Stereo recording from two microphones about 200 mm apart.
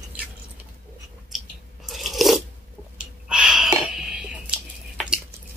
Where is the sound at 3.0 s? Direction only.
5° right (ahead or behind).